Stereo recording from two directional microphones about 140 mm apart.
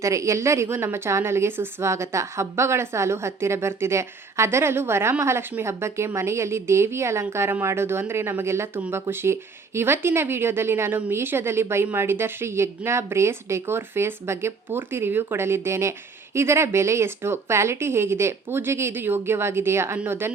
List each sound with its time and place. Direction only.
0.0 s a woman's voice: 20° right (ahead or behind)